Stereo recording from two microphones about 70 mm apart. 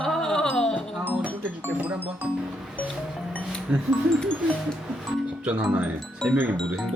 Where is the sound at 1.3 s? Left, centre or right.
Right.